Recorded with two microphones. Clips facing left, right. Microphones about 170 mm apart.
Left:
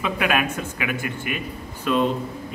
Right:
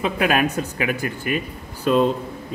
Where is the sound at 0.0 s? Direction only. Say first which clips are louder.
Right 3 dB; 35° right (ahead or behind).